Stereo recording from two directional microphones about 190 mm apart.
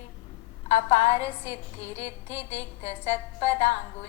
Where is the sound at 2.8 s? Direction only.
35° left (ahead or behind).